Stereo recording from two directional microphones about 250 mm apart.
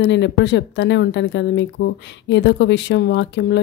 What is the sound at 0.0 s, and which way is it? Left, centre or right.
Speech, left.